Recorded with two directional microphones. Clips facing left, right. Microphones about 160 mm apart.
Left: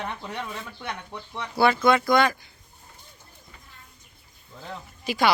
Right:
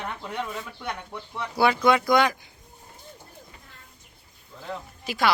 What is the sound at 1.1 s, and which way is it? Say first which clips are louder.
Speech: left 1 dB; 5° right (ahead or behind).